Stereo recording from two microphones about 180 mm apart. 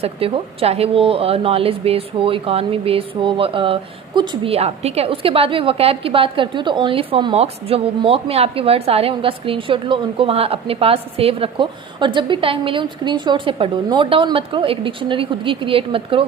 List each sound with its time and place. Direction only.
0.0 s speech: 35° right (ahead or behind)